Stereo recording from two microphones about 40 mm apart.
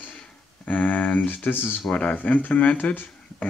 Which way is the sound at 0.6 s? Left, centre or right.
Left.